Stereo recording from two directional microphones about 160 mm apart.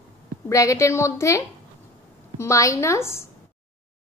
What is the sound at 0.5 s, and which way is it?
A woman's voice, 20° left (ahead or behind).